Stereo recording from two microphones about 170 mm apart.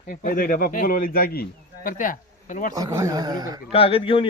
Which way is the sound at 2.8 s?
20° right (ahead or behind).